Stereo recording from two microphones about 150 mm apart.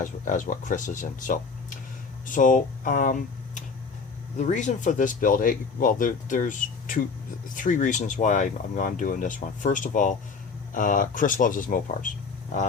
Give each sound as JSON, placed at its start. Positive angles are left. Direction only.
{"t": 0.0, "sound": "speech", "side_deg": 60}